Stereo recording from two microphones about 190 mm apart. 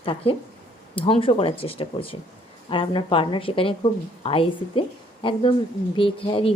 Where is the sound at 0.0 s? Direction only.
30° left (ahead or behind).